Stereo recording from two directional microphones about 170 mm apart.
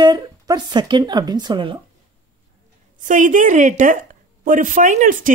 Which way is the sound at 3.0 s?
50° right (ahead or behind).